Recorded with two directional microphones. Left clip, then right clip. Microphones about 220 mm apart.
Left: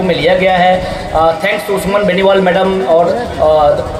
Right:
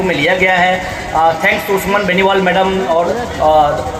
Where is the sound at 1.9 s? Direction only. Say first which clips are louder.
Left 3 dB; 50° left (ahead or behind).